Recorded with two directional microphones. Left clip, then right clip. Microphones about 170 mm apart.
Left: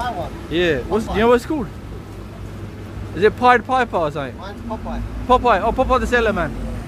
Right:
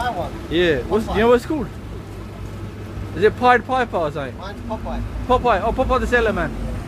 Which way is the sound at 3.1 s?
25° left (ahead or behind).